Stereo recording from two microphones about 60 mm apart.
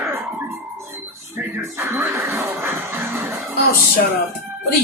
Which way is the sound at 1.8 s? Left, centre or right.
Right.